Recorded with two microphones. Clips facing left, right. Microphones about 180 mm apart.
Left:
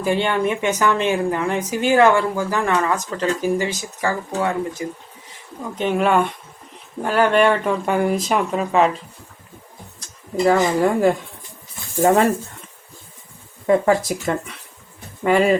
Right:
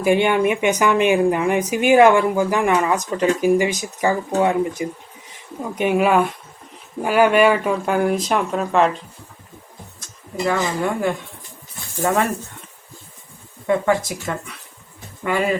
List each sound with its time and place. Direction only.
0.0 s speech: 15° right (ahead or behind); by 9.0 s centre (ahead or behind)
10.4 s speech: 35° left (ahead or behind)
13.7 s speech: 35° left (ahead or behind)